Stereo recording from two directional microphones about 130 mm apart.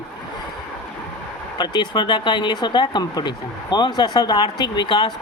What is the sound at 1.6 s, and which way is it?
Speech, 35° left (ahead or behind).